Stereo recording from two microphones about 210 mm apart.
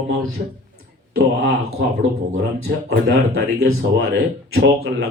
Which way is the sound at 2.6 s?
50° right (ahead or behind).